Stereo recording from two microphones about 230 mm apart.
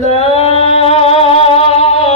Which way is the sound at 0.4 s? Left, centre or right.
Left.